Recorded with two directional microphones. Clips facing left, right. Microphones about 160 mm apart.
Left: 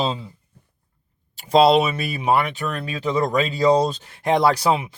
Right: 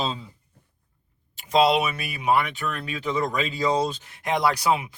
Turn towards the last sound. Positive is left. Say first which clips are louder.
# left 4 dB
turn(degrees=30)  # may be behind; listen again after turning